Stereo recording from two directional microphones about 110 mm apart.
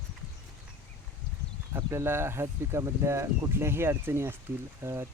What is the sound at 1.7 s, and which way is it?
Speech, 20° right (ahead or behind).